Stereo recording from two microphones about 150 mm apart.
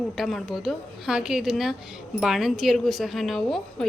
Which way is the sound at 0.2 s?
Centre (ahead or behind).